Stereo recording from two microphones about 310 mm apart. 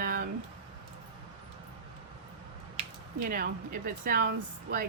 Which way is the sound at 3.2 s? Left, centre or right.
Right.